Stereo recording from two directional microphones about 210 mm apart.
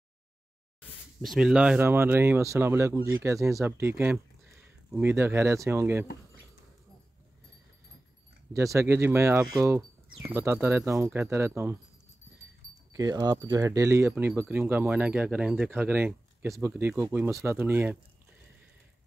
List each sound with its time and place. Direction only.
0.7 s speech: centre (ahead or behind)
8.5 s speech: 15° right (ahead or behind)
12.9 s speech: 15° right (ahead or behind)